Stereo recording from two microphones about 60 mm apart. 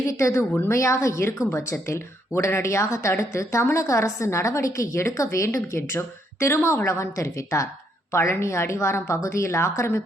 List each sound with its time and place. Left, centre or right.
0.1 s a woman's voice: left